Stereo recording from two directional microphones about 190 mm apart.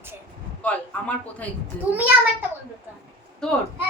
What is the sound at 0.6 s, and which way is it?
Speech, 5° left (ahead or behind).